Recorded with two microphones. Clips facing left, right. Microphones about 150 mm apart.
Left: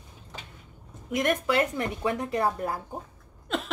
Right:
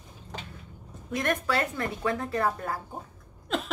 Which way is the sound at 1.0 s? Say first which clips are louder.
Left 3 dB; 15° left (ahead or behind).